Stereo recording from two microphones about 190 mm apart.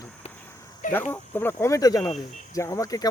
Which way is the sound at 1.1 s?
10° left (ahead or behind).